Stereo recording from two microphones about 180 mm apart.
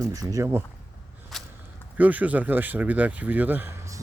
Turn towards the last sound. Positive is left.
turn(degrees=-15)  # may be behind; listen again after turning